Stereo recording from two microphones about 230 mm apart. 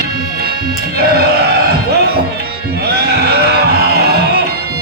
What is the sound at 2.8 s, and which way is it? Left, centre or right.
Music, right.